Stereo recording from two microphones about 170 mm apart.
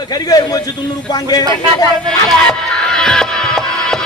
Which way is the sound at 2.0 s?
5° left (ahead or behind).